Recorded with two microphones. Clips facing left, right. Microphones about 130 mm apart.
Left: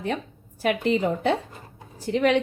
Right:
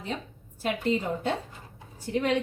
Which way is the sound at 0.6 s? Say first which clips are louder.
Left 5 dB; 85° left.